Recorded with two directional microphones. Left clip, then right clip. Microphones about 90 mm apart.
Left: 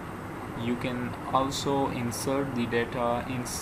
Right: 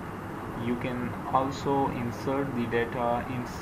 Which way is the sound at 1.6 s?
30° left (ahead or behind).